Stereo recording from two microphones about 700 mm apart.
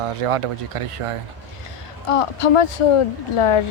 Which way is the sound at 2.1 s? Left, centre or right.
Left.